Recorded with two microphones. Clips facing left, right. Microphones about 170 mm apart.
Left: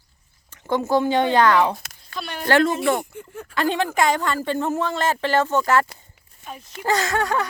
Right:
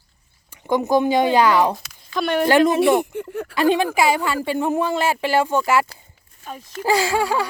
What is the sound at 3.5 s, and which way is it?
A woman's voice, 15° right (ahead or behind).